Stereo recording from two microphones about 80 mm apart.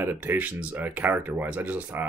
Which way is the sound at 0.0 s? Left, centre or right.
Right.